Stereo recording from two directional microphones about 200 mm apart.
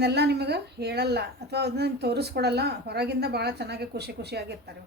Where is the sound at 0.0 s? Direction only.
55° right (ahead or behind).